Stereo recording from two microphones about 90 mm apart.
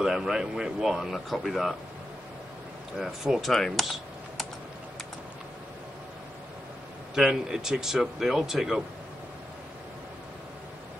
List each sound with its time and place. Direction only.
0.0 s speech: 5° right (ahead or behind)
3.0 s speech: centre (ahead or behind)
7.2 s speech: 5° right (ahead or behind)